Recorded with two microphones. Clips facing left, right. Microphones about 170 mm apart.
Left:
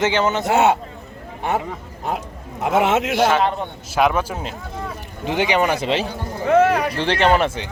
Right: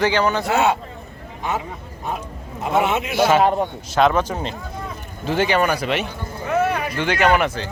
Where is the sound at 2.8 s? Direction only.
75° left (ahead or behind).